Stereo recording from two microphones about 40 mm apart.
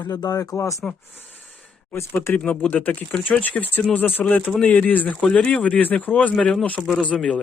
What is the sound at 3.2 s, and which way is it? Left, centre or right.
Speech, left.